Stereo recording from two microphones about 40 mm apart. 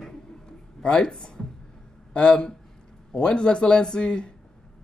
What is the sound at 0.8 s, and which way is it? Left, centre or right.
Speech, left.